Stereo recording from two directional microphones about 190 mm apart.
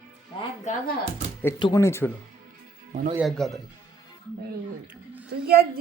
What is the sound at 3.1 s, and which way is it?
Speech, centre (ahead or behind).